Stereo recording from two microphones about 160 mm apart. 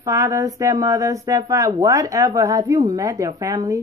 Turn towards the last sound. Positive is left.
turn(degrees=-20)  # may be behind; listen again after turning